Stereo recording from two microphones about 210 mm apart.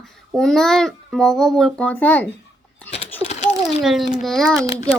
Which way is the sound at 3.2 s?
30° left (ahead or behind).